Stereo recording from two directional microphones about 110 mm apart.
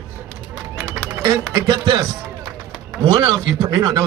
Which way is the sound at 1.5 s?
35° right (ahead or behind).